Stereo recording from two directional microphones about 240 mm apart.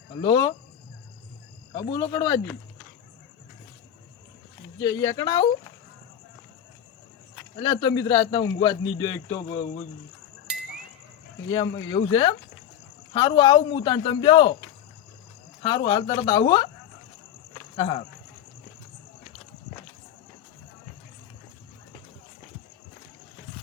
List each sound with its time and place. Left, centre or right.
0.2 s a man's voice: centre
1.9 s a man's voice: centre
5.0 s a man's voice: centre
7.3 s a man's voice: centre
11.5 s a man's voice: centre
15.6 s a man's voice: centre
17.7 s speech: left